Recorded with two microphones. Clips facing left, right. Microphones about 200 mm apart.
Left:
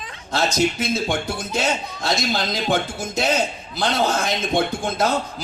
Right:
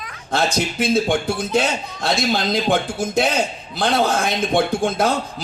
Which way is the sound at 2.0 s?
55° right (ahead or behind).